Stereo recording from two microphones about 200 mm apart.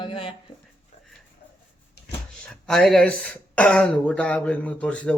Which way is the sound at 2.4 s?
5° left (ahead or behind).